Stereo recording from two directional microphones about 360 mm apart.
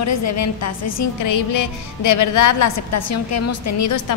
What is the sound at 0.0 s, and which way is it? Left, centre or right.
A woman's voice, left.